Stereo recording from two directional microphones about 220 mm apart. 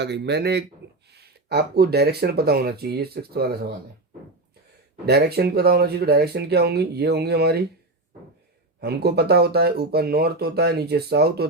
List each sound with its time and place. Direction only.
0.0 s speech: 50° right (ahead or behind)
5.0 s speech: 45° right (ahead or behind)
8.8 s speech: 45° right (ahead or behind)